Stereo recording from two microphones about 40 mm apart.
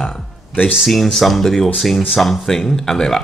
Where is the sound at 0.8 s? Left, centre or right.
Centre.